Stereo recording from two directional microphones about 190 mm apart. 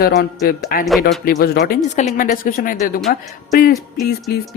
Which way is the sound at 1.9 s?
40° left (ahead or behind).